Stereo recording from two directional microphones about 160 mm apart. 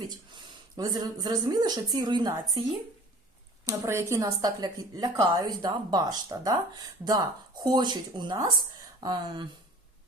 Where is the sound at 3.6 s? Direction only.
20° right (ahead or behind).